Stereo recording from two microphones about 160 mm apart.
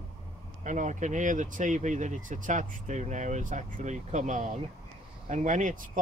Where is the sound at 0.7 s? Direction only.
50° right (ahead or behind).